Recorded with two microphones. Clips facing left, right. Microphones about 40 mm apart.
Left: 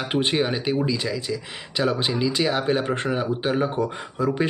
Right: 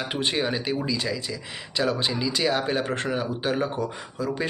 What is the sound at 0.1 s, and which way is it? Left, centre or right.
Speech, centre.